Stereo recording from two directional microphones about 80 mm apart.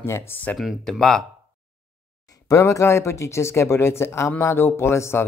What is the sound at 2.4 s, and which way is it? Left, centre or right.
Speech, left.